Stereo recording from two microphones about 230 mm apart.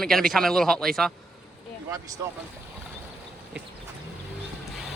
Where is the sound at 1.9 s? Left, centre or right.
Centre.